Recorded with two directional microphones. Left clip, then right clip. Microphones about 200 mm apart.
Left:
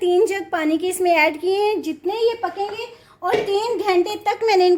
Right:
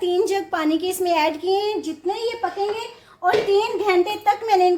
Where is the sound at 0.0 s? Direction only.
25° left (ahead or behind).